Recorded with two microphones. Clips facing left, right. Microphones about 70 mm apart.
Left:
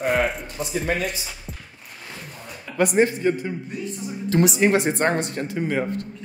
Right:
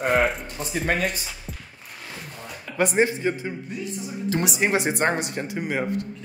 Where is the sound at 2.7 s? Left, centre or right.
Centre.